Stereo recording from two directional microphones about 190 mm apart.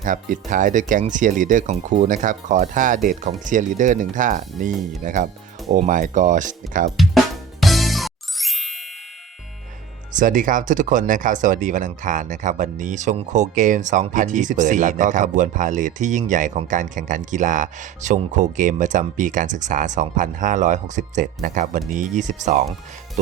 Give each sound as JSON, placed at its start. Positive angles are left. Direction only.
{"t": 0.0, "sound": "speech", "side_deg": -45}
{"t": 6.9, "sound": "drum", "side_deg": 0}
{"t": 7.6, "sound": "music", "side_deg": 0}
{"t": 10.1, "sound": "speech", "side_deg": -45}